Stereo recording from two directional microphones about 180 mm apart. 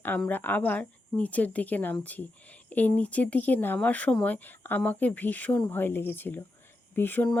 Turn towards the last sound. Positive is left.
turn(degrees=10)  # may be behind; listen again after turning